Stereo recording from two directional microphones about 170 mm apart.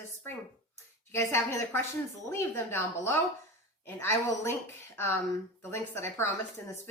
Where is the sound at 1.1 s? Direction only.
15° left (ahead or behind).